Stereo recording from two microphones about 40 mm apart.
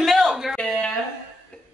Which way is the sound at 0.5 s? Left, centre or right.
Centre.